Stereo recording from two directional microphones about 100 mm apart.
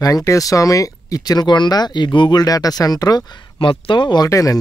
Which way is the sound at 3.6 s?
55° left (ahead or behind).